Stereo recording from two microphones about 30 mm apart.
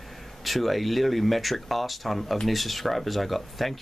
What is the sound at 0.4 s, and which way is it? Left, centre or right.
Speech, centre.